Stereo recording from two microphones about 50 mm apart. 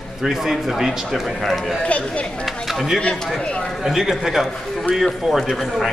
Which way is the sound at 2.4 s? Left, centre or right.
Centre.